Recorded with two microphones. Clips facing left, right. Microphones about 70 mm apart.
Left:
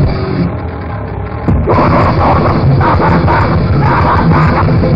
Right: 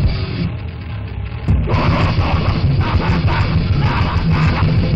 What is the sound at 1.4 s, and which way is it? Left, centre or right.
Music, left.